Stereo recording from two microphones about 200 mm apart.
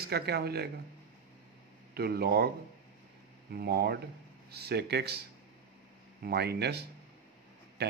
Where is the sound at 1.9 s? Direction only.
50° right (ahead or behind).